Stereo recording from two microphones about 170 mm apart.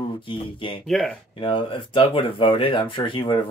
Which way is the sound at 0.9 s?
5° left (ahead or behind).